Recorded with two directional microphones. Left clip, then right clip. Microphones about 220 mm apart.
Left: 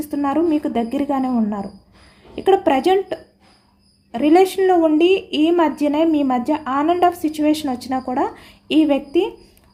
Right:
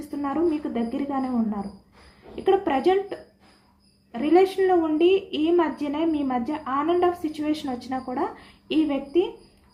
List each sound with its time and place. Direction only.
0.1 s a woman's voice: 50° left (ahead or behind)